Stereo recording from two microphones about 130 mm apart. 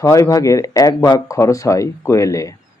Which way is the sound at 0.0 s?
25° left (ahead or behind).